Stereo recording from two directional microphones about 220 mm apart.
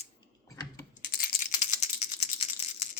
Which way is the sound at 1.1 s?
35° left (ahead or behind).